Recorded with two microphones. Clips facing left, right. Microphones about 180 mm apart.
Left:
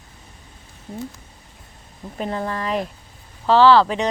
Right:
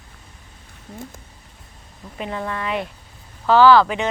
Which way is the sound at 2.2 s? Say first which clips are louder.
Left 2 dB; 35° left (ahead or behind).